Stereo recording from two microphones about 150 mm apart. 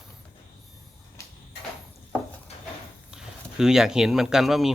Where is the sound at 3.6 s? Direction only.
5° right (ahead or behind).